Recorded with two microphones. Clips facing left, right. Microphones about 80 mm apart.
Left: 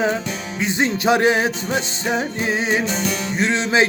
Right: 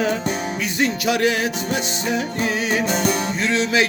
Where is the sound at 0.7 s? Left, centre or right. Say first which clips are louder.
Left 3 dB; left.